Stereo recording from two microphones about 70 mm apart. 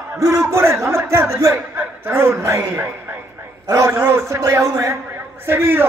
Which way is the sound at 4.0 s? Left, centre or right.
Right.